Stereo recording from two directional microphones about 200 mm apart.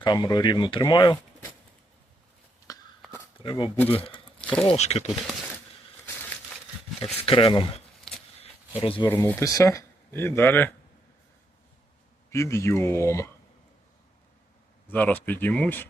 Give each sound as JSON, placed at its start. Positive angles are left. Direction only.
{"t": 0.0, "sound": "speech", "side_deg": 20}
{"t": 2.7, "sound": "a sound", "side_deg": 20}
{"t": 3.3, "sound": "speech", "side_deg": 25}
{"t": 4.4, "sound": "a sound", "side_deg": 5}
{"t": 4.7, "sound": "speech", "side_deg": 30}
{"t": 7.0, "sound": "speech", "side_deg": 30}
{"t": 8.4, "sound": "a sound", "side_deg": 30}
{"t": 9.0, "sound": "speech", "side_deg": 10}
{"t": 12.3, "sound": "speech", "side_deg": 15}
{"t": 14.8, "sound": "speech", "side_deg": 10}